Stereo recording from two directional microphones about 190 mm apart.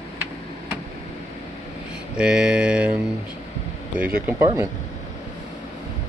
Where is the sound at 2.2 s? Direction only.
5° right (ahead or behind).